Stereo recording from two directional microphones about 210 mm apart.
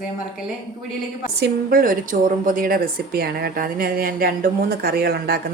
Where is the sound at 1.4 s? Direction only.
40° right (ahead or behind).